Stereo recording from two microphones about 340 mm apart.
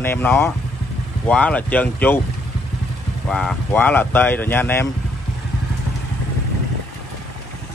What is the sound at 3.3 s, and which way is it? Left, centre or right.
Speech, centre.